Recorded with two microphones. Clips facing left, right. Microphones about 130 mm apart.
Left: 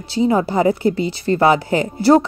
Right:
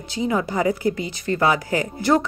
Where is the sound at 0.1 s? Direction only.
35° left (ahead or behind).